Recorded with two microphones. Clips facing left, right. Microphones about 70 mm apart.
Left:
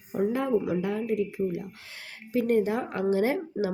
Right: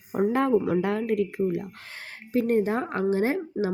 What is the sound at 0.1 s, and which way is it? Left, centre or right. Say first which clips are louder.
Speech: right 3 dB; right.